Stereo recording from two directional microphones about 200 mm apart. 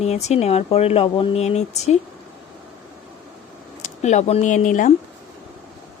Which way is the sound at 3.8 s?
35° left (ahead or behind).